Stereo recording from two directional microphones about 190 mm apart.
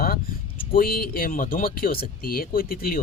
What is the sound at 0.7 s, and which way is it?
Speech, 50° left (ahead or behind).